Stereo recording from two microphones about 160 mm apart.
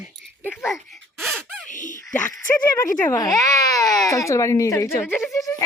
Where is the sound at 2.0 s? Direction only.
15° left (ahead or behind).